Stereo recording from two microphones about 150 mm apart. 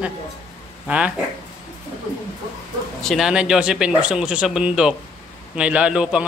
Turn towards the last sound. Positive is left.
turn(degrees=-5)  # may be behind; listen again after turning